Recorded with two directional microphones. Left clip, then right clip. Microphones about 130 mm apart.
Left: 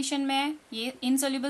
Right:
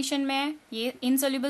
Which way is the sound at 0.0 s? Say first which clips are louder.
Even; 30° right (ahead or behind).